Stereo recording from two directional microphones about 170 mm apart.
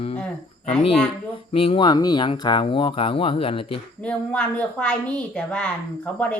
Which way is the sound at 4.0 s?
5° left (ahead or behind).